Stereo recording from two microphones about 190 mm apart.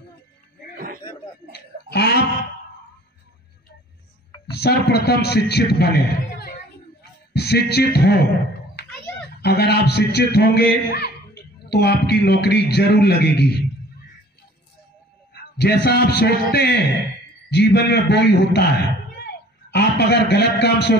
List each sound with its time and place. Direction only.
0.7 s a sound: 50° right (ahead or behind)
1.5 s wail: 60° left (ahead or behind)
4.5 s a man's voice: 60° left (ahead or behind)
8.8 s children playing: 60° left (ahead or behind)
9.4 s a man's voice: 60° left (ahead or behind)
15.5 s a man's voice: 60° left (ahead or behind)